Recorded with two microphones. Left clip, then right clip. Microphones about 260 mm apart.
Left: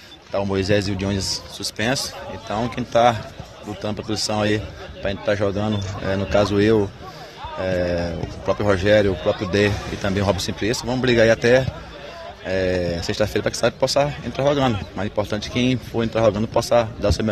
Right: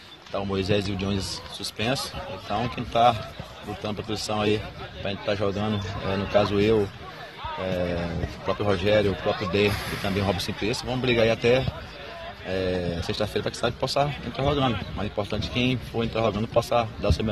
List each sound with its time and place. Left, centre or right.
0.4 s speech: left
8.5 s speech: left